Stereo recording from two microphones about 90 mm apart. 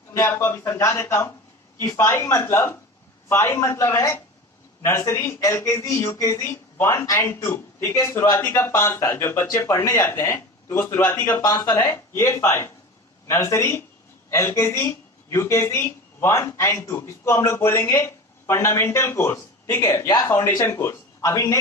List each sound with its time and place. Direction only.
0.1 s speech: 30° left (ahead or behind)
10.3 s a sound: 25° left (ahead or behind)
10.9 s speech: 25° left (ahead or behind)
11.4 s speech: 40° left (ahead or behind)
21.2 s speech: 40° left (ahead or behind)